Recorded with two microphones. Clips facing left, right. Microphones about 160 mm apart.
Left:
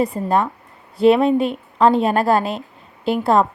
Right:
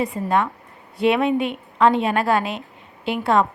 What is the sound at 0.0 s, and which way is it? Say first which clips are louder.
A woman's voice: left 3 dB; 35° left (ahead or behind).